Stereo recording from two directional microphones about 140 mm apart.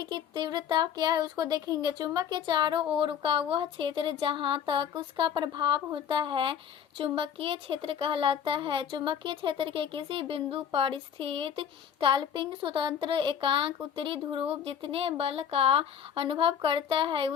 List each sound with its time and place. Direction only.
0.0 s speech: 30° right (ahead or behind)